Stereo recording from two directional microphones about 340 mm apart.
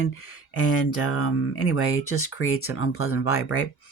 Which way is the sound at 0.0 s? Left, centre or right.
Left.